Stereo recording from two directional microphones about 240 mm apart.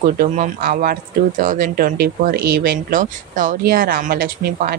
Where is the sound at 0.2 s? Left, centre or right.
Right.